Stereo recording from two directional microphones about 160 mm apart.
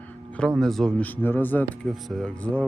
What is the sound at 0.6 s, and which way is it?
Speech, centre (ahead or behind).